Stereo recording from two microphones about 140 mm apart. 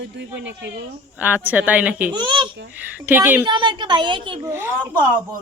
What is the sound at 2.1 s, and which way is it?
Speech, 35° right (ahead or behind).